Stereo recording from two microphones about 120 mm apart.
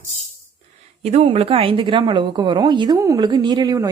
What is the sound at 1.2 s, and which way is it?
A woman's voice, 50° right (ahead or behind).